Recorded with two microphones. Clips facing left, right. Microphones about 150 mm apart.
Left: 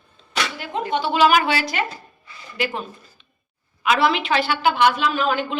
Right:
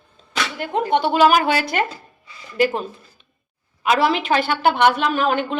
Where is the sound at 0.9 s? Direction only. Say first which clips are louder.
Right 2 dB; 55° right (ahead or behind).